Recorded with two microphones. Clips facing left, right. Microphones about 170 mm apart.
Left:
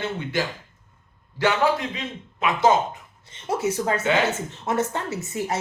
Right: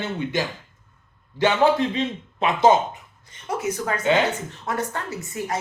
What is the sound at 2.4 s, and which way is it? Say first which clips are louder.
Speech: right 2 dB; 20° right (ahead or behind).